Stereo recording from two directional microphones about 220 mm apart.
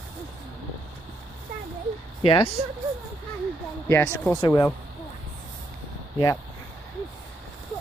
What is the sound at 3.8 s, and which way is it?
Speech, 10° left (ahead or behind).